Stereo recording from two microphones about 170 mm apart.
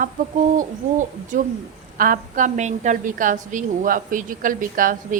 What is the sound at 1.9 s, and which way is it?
A woman's voice, 55° right (ahead or behind).